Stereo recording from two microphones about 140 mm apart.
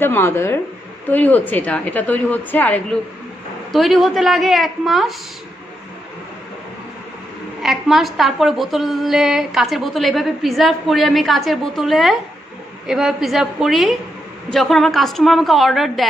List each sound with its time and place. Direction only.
0.0 s a woman's voice: 15° left (ahead or behind)
3.7 s a woman's voice: centre (ahead or behind)
7.6 s a woman's voice: centre (ahead or behind)